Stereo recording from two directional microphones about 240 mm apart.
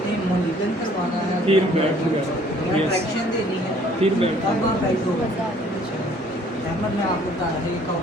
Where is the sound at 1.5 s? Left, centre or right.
Right.